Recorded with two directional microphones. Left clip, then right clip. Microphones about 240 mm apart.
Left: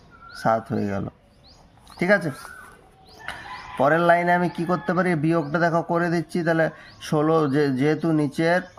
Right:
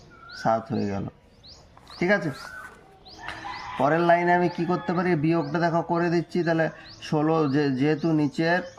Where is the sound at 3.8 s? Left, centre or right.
Left.